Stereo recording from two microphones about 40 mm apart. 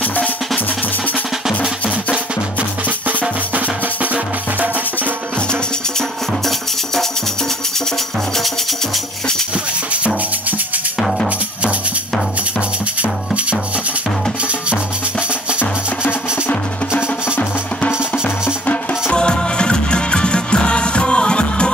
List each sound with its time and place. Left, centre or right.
3.5 s music: right
19.1 s music: left